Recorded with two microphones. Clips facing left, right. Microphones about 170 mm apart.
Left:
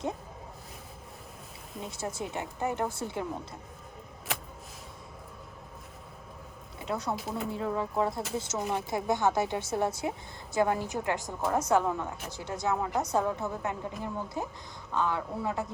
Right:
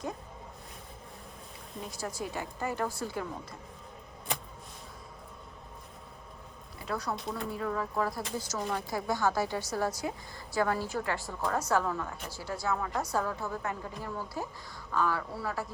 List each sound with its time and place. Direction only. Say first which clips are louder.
1.8 s a woman's voice: left 2 dB; 25° left (ahead or behind)
6.7 s speech: left 2 dB; 20° left (ahead or behind)
7.2 s speech: left 2 dB; 5° left (ahead or behind)
7.5 s a woman's voice: left 2 dB; 25° left (ahead or behind)